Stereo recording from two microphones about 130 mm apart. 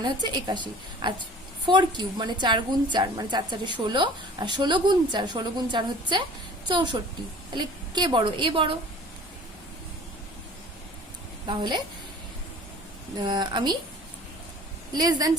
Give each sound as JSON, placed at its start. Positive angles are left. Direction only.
{"t": 0.0, "sound": "a woman's voice", "side_deg": -35}
{"t": 11.4, "sound": "a woman's voice", "side_deg": -35}
{"t": 13.1, "sound": "a woman's voice", "side_deg": -35}
{"t": 14.9, "sound": "speech", "side_deg": -30}